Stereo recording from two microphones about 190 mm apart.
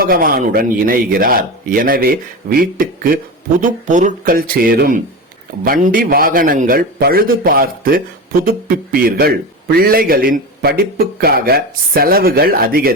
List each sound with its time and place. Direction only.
0.0 s a man's voice: 50° right (ahead or behind)